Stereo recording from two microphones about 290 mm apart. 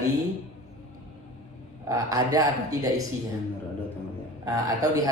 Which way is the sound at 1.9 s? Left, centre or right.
Centre.